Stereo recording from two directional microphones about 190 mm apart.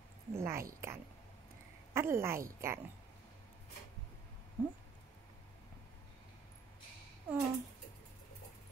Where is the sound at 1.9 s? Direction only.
15° right (ahead or behind).